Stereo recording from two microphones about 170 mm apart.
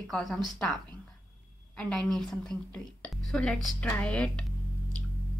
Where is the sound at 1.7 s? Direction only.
5° left (ahead or behind).